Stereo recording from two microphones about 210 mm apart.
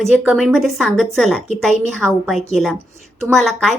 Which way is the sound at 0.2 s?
Centre (ahead or behind).